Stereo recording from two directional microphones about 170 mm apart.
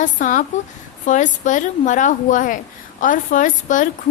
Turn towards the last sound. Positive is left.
turn(degrees=50)  # may be behind; listen again after turning